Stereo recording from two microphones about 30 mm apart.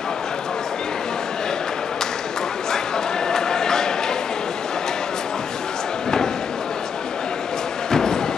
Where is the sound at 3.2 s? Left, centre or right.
Left.